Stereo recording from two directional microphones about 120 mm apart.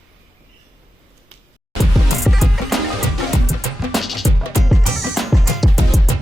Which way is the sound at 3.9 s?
Centre (ahead or behind).